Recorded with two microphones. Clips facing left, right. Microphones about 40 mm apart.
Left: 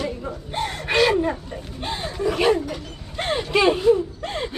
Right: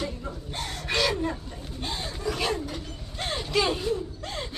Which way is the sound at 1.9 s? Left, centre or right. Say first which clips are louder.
Left 7 dB; left.